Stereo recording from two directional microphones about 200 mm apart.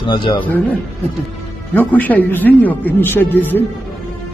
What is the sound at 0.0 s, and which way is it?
Speech, 25° left (ahead or behind).